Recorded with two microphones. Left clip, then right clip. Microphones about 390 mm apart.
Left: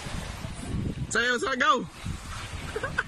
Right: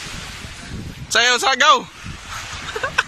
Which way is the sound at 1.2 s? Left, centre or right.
Centre.